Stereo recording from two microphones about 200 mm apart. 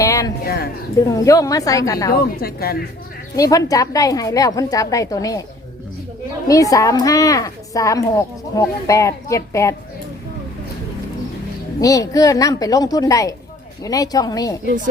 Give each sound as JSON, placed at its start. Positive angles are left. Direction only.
{"t": 0.0, "sound": "a sound", "side_deg": 15}
{"t": 0.4, "sound": "speech", "side_deg": 50}
{"t": 0.9, "sound": "a woman's voice", "side_deg": 15}
{"t": 2.1, "sound": "a woman's voice", "side_deg": 50}
{"t": 3.3, "sound": "a woman's voice", "side_deg": 15}
{"t": 6.5, "sound": "a woman's voice", "side_deg": 15}
{"t": 11.8, "sound": "a woman's voice", "side_deg": 15}